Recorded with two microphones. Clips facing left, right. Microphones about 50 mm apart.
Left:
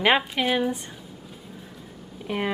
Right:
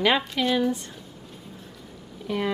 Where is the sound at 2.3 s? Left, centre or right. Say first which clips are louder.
Even; left.